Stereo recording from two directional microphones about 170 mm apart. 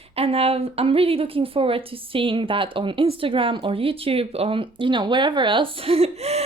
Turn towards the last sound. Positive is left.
turn(degrees=-40)  # may be behind; listen again after turning